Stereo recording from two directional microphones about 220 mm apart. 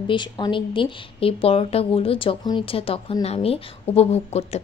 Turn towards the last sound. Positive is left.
turn(degrees=30)  # may be behind; listen again after turning